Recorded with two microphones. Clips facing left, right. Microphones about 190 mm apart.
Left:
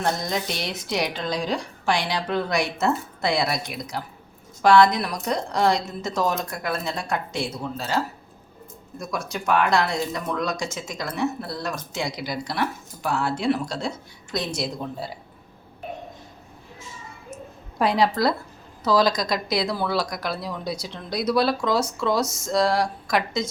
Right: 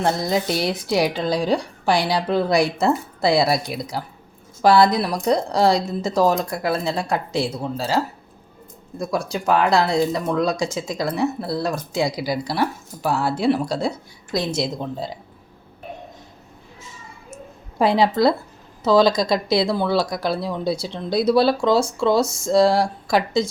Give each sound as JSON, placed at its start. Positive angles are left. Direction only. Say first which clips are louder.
{"t": 0.0, "sound": "speech", "louder": "right 5 dB", "side_deg": -30}
{"t": 9.0, "sound": "speech", "louder": "right 6 dB", "side_deg": -30}
{"t": 17.7, "sound": "speech", "louder": "right 4 dB", "side_deg": -25}